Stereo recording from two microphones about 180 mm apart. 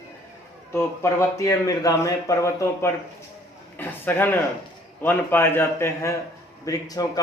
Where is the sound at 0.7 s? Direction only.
15° left (ahead or behind).